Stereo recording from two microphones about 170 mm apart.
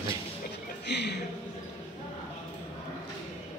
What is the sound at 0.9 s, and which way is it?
Speech, 80° left.